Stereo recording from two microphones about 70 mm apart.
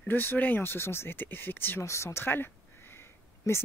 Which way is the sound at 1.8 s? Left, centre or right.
Left.